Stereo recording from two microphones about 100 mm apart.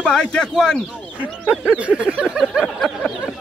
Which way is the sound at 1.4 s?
10° right (ahead or behind).